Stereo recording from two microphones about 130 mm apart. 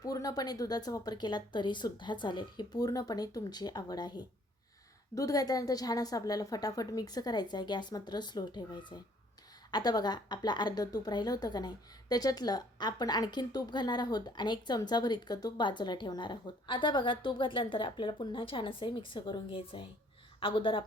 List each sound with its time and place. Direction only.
0.0 s a woman's voice: 30° left (ahead or behind)